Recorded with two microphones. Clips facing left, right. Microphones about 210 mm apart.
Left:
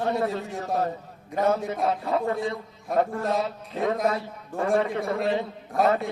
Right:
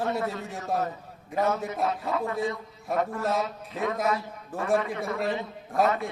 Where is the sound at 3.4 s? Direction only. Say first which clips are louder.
Left 3 dB; 30° left (ahead or behind).